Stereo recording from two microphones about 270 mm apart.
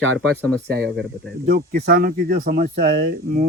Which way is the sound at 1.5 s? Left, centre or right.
Right.